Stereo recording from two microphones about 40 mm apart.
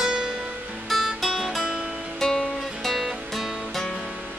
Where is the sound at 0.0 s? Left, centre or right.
Right.